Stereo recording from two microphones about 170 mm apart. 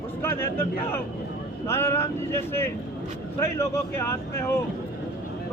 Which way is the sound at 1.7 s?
15° left (ahead or behind).